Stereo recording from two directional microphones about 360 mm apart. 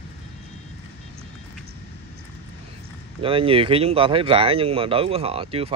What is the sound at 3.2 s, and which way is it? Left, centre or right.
Speech, centre.